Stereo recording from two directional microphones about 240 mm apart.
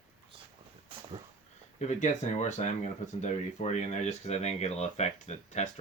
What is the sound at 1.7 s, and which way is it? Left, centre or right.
Speech, left.